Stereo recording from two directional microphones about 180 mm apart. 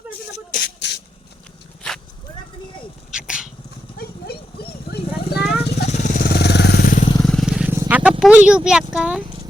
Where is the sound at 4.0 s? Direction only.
55° left (ahead or behind).